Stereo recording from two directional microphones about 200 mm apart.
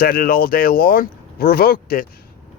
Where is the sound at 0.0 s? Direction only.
50° left (ahead or behind).